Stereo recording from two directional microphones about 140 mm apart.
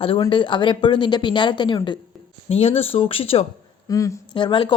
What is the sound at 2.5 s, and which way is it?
Speech, 45° left (ahead or behind).